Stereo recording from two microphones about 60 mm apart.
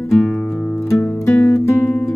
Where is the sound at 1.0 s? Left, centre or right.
Left.